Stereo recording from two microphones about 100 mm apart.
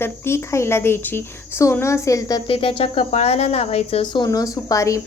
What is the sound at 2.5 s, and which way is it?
A woman's voice, 65° left (ahead or behind).